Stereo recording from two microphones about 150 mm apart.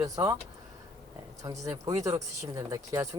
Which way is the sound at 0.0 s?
20° right (ahead or behind).